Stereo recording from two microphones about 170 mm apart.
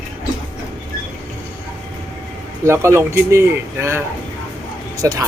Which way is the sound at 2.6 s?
15° right (ahead or behind).